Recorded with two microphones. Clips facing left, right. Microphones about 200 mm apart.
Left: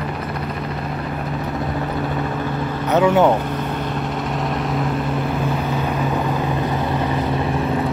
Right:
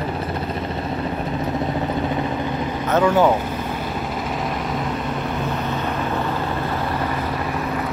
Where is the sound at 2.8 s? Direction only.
15° left (ahead or behind).